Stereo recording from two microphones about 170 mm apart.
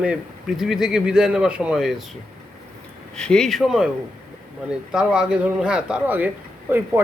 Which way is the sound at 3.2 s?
5° left (ahead or behind).